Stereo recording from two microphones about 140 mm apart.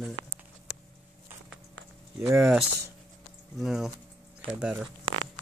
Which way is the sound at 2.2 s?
20° right (ahead or behind).